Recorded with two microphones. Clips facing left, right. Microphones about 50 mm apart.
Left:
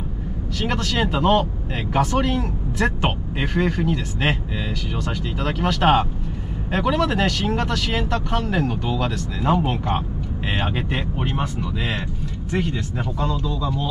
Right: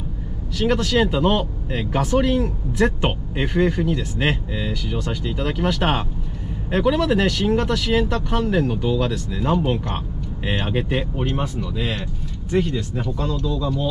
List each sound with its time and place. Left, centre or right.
0.6 s speech: centre
2.2 s speech: centre
9.4 s speech: centre